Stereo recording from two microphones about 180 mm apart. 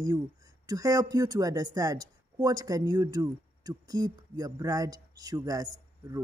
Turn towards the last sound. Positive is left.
turn(degrees=-20)  # may be behind; listen again after turning